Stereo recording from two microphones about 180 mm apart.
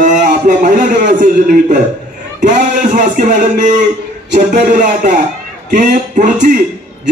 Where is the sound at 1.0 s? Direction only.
65° right (ahead or behind).